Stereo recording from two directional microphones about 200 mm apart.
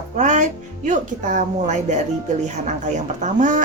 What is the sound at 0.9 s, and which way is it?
Speech, 40° right (ahead or behind).